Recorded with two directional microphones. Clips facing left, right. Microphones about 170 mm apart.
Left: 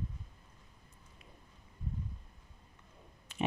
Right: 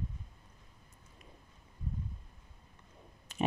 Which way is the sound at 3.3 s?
40° right (ahead or behind).